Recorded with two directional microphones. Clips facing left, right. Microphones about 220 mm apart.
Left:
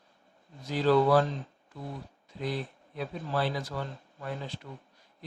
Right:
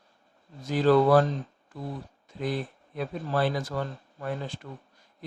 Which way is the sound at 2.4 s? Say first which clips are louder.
Right 3 dB; 50° right (ahead or behind).